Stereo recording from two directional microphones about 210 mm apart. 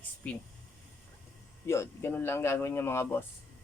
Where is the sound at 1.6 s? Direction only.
15° left (ahead or behind).